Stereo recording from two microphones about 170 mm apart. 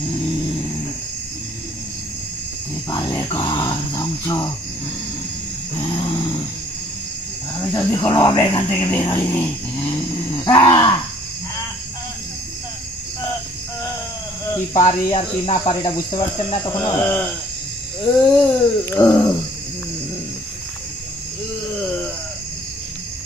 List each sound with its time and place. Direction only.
2.9 s speech: 20° left (ahead or behind)
5.8 s roaring cats: 25° left (ahead or behind)
7.7 s speech: 25° left (ahead or behind)
9.3 s a sound: 10° left (ahead or behind)
9.8 s a sound: 25° left (ahead or behind)
14.7 s speech: 35° left (ahead or behind)
17.0 s speech: 15° left (ahead or behind)
18.4 s speech: 15° left (ahead or behind)